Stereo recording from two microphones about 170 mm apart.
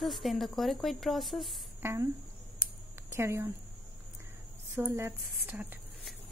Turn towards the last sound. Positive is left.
turn(degrees=-5)  # may be behind; listen again after turning